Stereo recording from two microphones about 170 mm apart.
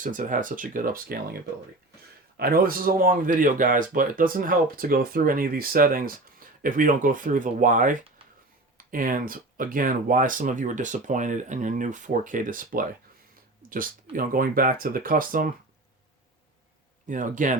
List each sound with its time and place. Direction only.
0.0 s speech: 50° right (ahead or behind)
2.4 s speech: 60° right (ahead or behind)
8.2 s a sound: 35° right (ahead or behind)
8.8 s speech: 55° right (ahead or behind)
17.1 s speech: 50° right (ahead or behind)